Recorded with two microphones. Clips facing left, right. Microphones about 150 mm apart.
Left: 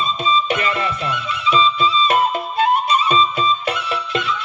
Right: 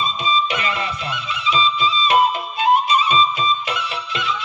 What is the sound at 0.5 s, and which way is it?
Music, 50° left (ahead or behind).